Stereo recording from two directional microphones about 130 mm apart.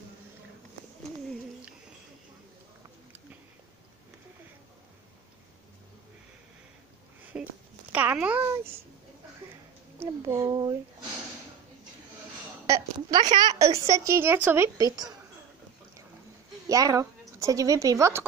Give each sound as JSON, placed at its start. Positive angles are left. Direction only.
{"t": 7.3, "sound": "a sound", "side_deg": -10}
{"t": 7.9, "sound": "babbling", "side_deg": -10}
{"t": 9.9, "sound": "a woman's voice", "side_deg": -25}
{"t": 12.6, "sound": "a woman's voice", "side_deg": -25}
{"t": 14.8, "sound": "a woman's voice", "side_deg": -30}
{"t": 16.6, "sound": "a woman's voice", "side_deg": -25}